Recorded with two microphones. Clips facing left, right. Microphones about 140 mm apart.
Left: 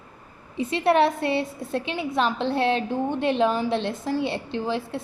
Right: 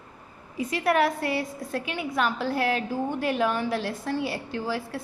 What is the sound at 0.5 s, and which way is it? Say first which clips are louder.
A woman's voice: left 3 dB; 25° left (ahead or behind).